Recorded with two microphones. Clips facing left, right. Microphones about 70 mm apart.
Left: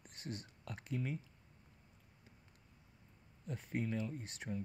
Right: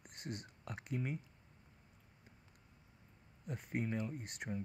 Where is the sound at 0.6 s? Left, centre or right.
Right.